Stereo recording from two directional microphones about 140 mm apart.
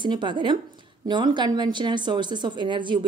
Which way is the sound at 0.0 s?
35° right (ahead or behind).